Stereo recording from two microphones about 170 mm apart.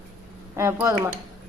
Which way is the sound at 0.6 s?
15° right (ahead or behind).